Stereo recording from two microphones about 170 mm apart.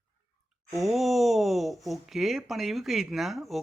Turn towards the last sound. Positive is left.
turn(degrees=0)  # may be behind; listen again after turning